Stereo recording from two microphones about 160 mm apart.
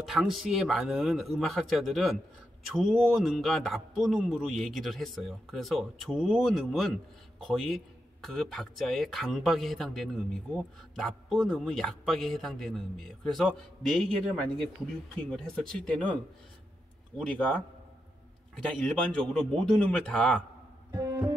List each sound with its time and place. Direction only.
0.0 s speech: centre (ahead or behind)
17.2 s speech: 10° left (ahead or behind)
18.6 s speech: 5° left (ahead or behind)
20.9 s music: 20° right (ahead or behind)